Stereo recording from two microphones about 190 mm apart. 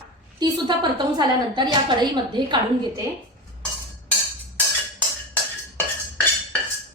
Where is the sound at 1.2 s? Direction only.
25° right (ahead or behind).